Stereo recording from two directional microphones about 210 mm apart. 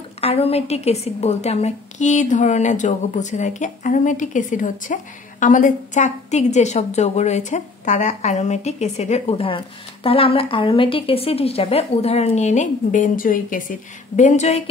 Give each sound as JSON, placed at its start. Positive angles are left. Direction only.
{"t": 0.2, "sound": "a woman's voice", "side_deg": 30}